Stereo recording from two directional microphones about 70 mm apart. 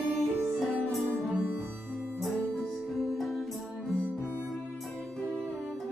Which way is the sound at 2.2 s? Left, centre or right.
Centre.